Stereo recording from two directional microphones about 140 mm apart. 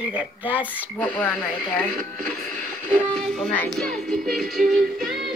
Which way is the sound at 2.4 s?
65° right (ahead or behind).